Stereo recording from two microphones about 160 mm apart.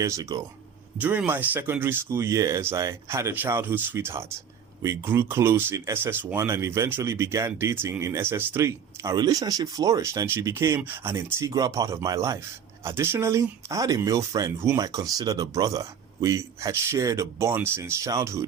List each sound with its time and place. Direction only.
0.0 s speech: 20° right (ahead or behind)
0.9 s speech: 10° right (ahead or behind)